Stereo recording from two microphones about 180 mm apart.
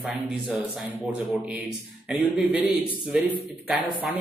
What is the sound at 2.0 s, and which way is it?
Speech, 5° right (ahead or behind).